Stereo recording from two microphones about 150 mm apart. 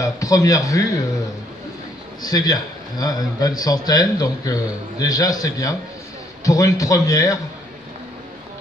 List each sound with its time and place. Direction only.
0.0 s a man's voice: 20° left (ahead or behind)
2.2 s a man's voice: 25° left (ahead or behind)